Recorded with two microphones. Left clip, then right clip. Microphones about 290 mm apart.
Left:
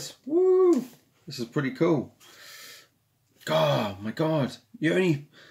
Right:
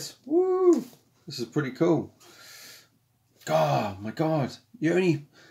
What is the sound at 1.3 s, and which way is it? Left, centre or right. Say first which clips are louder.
Speech: even; centre.